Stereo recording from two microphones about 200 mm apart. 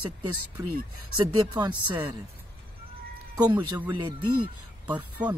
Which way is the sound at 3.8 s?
20° right (ahead or behind).